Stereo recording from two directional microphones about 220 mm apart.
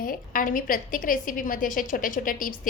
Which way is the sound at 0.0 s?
40° left (ahead or behind).